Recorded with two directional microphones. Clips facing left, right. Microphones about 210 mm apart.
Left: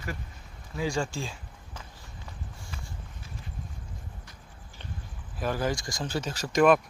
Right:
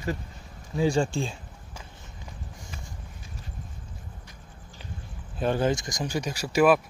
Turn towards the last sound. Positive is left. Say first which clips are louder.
# right 1 dB
turn(degrees=-5)  # may be behind; listen again after turning